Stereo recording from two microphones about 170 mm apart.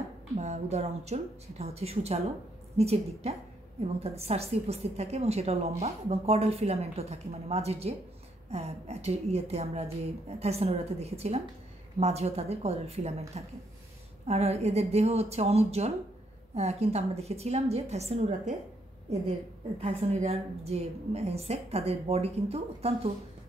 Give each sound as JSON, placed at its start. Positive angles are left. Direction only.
{"t": 0.4, "sound": "a woman's voice", "side_deg": -40}